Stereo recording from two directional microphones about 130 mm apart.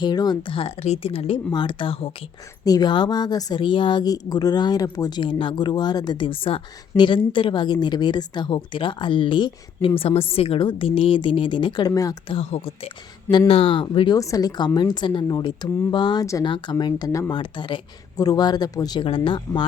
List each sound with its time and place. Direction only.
0.0 s speech: 30° left (ahead or behind); by 1.4 s 50° left (ahead or behind)
1.5 s a woman's voice: 35° left (ahead or behind)
2.6 s a woman's voice: 30° left (ahead or behind)
12.3 s a woman's voice: 50° left (ahead or behind)
14.2 s a woman's voice: 25° left (ahead or behind)
17.3 s a woman's voice: 40° left (ahead or behind)
19.0 s a woman's voice: 45° left (ahead or behind)